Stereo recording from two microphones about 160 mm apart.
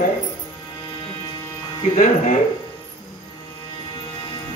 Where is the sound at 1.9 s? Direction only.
55° left (ahead or behind).